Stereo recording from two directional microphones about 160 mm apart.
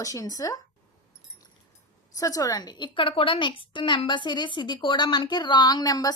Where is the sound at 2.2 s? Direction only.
20° left (ahead or behind).